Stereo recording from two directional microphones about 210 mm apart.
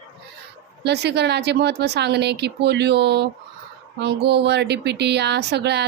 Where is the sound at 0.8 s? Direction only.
55° right (ahead or behind).